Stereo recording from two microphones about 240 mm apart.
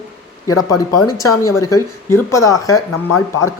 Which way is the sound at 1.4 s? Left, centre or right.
Centre.